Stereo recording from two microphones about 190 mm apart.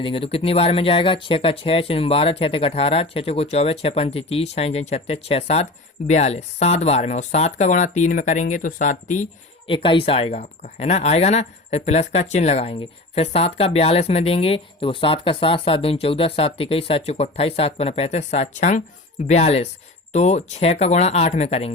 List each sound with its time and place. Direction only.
0.0 s speech: 30° left (ahead or behind)
9.7 s speech: 25° left (ahead or behind)